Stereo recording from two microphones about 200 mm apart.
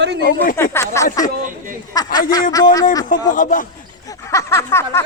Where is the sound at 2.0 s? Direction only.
20° left (ahead or behind).